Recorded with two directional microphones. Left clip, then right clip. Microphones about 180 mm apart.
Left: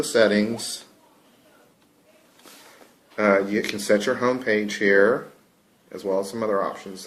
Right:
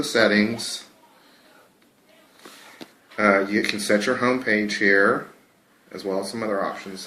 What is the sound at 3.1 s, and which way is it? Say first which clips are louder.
Speech: right 1 dB; 55° left (ahead or behind).